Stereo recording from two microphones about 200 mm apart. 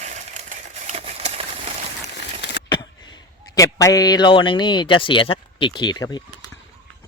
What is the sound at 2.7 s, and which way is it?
A man's voice, 20° left (ahead or behind).